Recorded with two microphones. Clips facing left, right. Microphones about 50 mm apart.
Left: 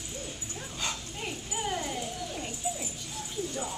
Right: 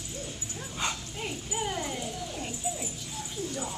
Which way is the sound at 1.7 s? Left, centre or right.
Centre.